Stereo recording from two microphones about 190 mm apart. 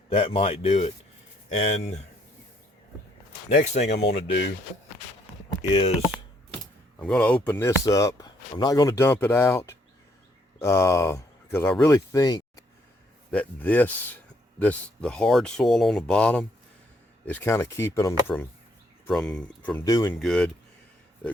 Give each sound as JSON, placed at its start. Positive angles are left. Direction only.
{"t": 0.1, "sound": "a man's voice", "side_deg": 30}
{"t": 3.8, "sound": "speech", "side_deg": 65}
{"t": 7.0, "sound": "speech", "side_deg": 5}
{"t": 13.3, "sound": "speech", "side_deg": 10}
{"t": 19.8, "sound": "speech", "side_deg": 20}
{"t": 20.1, "sound": "speech", "side_deg": 5}